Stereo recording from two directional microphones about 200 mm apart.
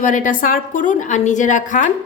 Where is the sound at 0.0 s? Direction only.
40° left (ahead or behind).